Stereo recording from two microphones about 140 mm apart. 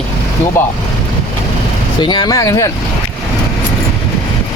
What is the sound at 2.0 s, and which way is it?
Speech, 30° left (ahead or behind).